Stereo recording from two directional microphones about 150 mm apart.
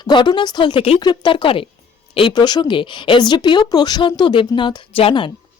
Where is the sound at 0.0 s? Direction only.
30° left (ahead or behind).